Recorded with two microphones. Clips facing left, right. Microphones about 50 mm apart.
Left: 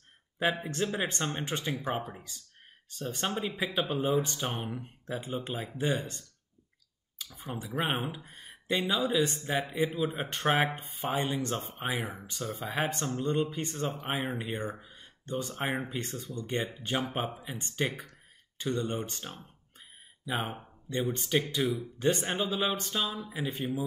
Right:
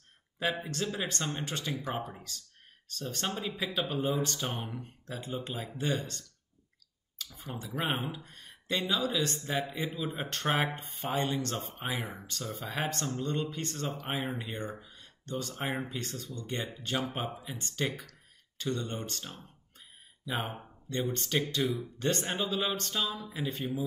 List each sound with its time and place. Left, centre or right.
0.7 s speech: left
10.7 s speech: centre
20.3 s speech: centre